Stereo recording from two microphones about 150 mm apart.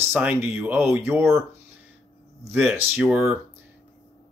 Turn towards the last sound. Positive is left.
turn(degrees=-10)  # may be behind; listen again after turning